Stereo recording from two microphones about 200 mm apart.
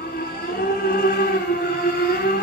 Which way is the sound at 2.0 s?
45° left (ahead or behind).